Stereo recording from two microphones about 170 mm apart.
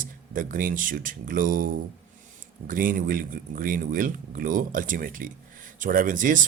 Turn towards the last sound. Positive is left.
turn(degrees=-50)  # may be behind; listen again after turning